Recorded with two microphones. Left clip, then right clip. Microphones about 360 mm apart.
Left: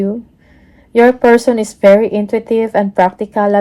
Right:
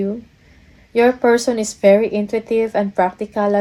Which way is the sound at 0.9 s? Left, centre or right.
Centre.